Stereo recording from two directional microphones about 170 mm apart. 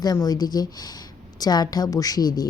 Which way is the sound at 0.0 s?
20° left (ahead or behind).